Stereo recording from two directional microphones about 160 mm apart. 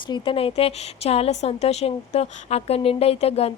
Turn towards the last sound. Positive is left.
turn(degrees=40)  # may be behind; listen again after turning